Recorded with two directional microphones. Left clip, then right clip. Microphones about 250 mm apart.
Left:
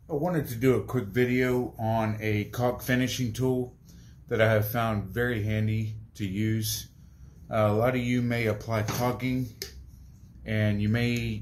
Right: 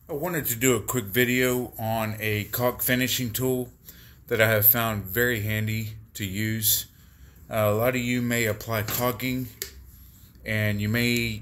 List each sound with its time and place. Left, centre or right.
0.2 s speech: right
10.4 s speech: right